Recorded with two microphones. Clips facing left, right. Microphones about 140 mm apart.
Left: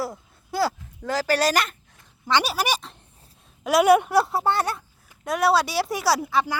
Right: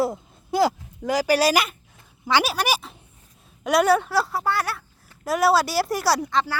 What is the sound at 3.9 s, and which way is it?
Speech, 20° left (ahead or behind).